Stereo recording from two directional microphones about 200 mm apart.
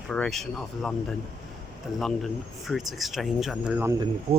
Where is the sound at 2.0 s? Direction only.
Centre (ahead or behind).